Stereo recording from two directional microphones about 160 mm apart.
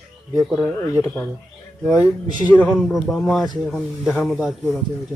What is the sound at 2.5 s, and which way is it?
Speech, 10° left (ahead or behind).